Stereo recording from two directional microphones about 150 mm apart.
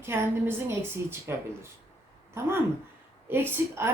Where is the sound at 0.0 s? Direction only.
15° right (ahead or behind).